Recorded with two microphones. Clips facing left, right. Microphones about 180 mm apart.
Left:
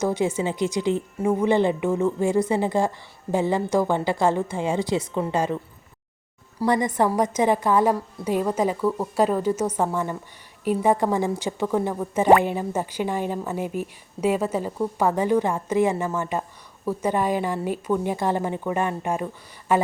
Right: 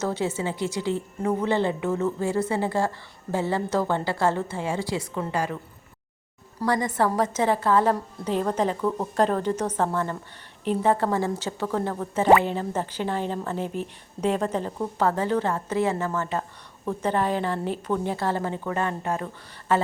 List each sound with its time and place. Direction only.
0.0 s speech: 15° left (ahead or behind)
6.7 s speech: 15° left (ahead or behind)